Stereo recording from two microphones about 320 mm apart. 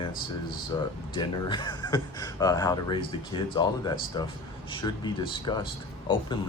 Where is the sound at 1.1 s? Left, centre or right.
Centre.